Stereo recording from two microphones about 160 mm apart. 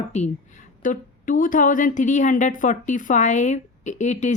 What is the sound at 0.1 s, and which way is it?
Speech, 45° left (ahead or behind).